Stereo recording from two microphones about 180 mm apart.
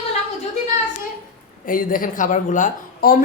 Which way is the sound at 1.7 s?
50° left (ahead or behind).